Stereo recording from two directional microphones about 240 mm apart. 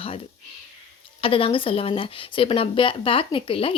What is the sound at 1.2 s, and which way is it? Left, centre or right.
Speech, left.